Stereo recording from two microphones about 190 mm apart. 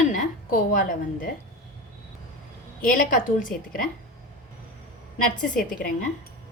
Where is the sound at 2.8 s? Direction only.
45° left (ahead or behind).